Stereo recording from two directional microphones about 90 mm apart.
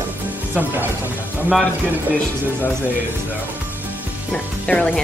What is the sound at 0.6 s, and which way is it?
Speech, 20° right (ahead or behind).